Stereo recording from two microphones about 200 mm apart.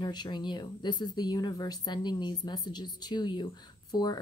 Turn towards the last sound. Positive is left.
turn(degrees=20)  # may be behind; listen again after turning